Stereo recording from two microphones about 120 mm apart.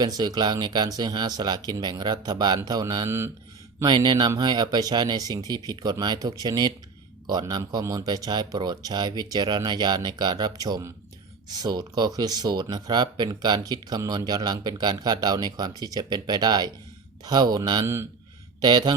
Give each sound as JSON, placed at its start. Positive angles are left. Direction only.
{"t": 0.0, "sound": "speech", "side_deg": -35}
{"t": 17.8, "sound": "a man's voice", "side_deg": -20}
{"t": 18.6, "sound": "speech", "side_deg": -35}